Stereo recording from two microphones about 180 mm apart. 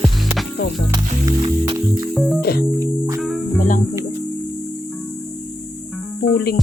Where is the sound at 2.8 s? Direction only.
20° right (ahead or behind).